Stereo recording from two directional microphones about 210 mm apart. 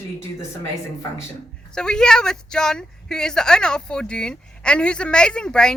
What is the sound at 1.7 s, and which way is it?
A woman's voice, 5° left (ahead or behind).